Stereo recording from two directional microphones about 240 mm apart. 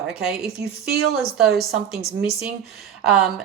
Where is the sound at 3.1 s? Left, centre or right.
Centre.